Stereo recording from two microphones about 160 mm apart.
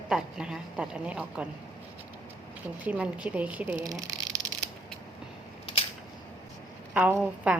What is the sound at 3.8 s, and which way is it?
Speech, 20° right (ahead or behind).